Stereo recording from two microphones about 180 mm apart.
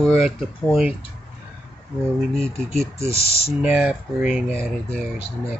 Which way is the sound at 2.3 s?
Centre (ahead or behind).